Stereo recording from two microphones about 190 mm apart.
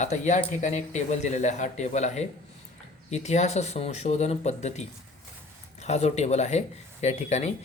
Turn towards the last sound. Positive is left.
turn(degrees=35)  # may be behind; listen again after turning